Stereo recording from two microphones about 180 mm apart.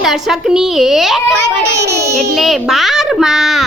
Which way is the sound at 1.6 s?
65° right (ahead or behind).